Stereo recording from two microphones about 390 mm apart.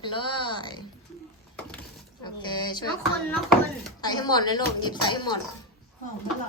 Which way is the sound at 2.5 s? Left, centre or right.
Centre.